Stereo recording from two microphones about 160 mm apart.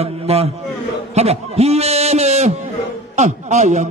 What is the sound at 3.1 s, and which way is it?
Speech, 45° right (ahead or behind).